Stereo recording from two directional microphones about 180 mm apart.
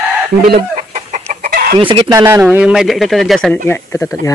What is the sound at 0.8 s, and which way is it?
Chicken, 45° right (ahead or behind).